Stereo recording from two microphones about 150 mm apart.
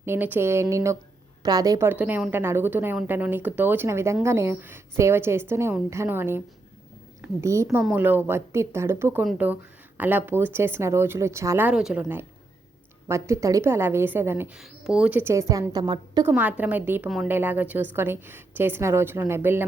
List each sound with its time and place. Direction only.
0.0 s a woman's voice: 15° right (ahead or behind)
13.1 s a woman's voice: 20° right (ahead or behind)
16.2 s a woman's voice: 10° right (ahead or behind)